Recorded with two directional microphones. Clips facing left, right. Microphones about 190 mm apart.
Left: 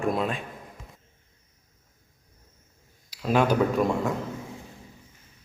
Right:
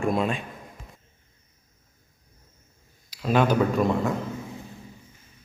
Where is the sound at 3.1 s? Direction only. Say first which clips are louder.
Right 1 dB; 5° left (ahead or behind).